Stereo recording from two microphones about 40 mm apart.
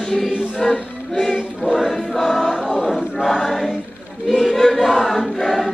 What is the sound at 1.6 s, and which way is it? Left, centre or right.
Choir, left.